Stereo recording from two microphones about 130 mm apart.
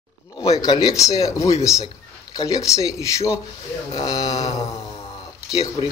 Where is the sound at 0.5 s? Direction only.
30° left (ahead or behind).